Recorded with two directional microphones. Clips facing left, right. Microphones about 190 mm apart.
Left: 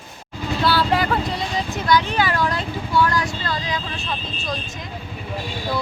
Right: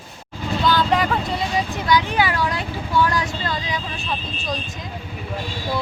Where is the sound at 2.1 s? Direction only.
15° right (ahead or behind).